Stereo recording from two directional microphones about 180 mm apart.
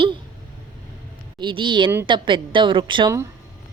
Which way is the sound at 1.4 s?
25° right (ahead or behind).